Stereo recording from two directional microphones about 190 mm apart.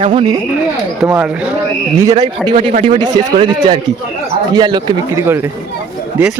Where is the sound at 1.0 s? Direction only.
15° right (ahead or behind).